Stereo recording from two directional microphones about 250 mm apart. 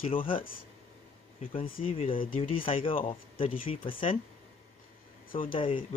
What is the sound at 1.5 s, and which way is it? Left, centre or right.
Speech, left.